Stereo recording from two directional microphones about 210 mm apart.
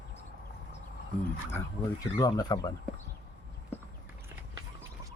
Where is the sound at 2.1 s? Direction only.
20° left (ahead or behind).